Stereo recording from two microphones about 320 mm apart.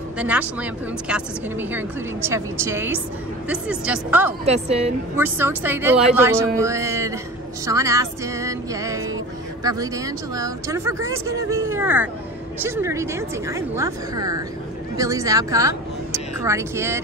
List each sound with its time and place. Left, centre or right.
0.2 s a woman's voice: centre
4.5 s a woman's voice: centre
5.1 s speech: centre